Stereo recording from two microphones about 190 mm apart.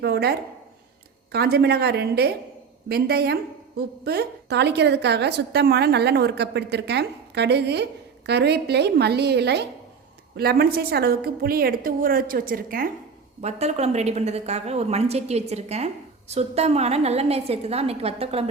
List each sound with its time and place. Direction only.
0.0 s a sound: 60° right (ahead or behind)
1.3 s a woman's voice: 55° right (ahead or behind)
13.4 s a woman's voice: 35° right (ahead or behind)